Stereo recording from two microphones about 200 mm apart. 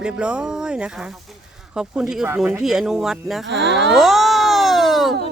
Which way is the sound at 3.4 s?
60° right (ahead or behind).